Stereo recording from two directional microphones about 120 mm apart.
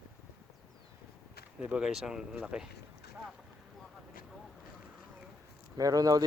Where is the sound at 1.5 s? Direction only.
10° right (ahead or behind).